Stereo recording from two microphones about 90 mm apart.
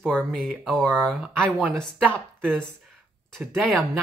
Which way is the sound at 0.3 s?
Centre (ahead or behind).